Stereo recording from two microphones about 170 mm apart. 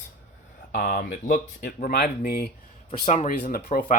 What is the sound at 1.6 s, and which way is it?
Speech, 75° left (ahead or behind).